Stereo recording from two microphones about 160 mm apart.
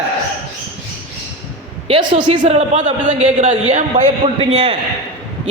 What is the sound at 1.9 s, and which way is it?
A man's voice, 30° right (ahead or behind).